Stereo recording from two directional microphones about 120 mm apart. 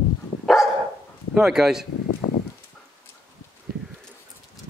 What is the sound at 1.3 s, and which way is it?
Speech, 5° right (ahead or behind).